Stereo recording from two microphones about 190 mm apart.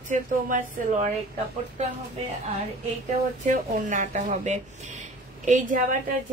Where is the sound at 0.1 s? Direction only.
40° right (ahead or behind).